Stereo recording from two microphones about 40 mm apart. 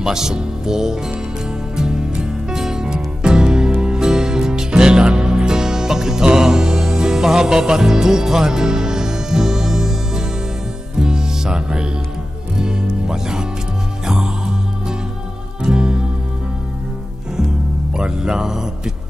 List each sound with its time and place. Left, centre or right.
0.0 s speech: centre
1.8 s music: centre
17.9 s speech: centre